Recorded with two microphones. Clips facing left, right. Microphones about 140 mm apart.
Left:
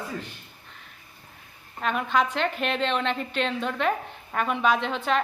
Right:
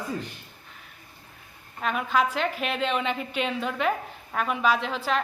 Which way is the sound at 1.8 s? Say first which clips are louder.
Even; centre (ahead or behind).